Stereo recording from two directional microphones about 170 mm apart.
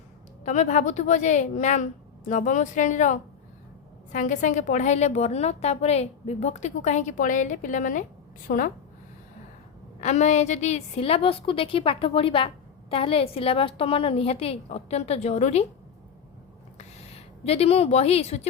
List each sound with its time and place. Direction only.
0.4 s a woman's voice: 45° left (ahead or behind)
10.0 s a woman's voice: 40° left (ahead or behind)
16.7 s a sound: 35° left (ahead or behind)